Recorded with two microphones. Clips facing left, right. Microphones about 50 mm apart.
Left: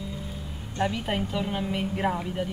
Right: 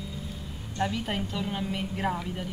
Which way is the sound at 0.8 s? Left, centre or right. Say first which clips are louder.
Left 2 dB; centre.